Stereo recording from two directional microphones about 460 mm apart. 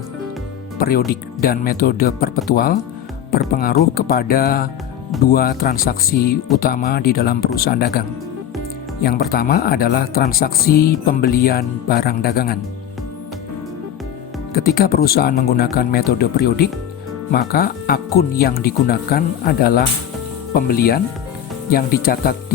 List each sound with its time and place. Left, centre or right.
0.8 s speech: centre
14.5 s speech: centre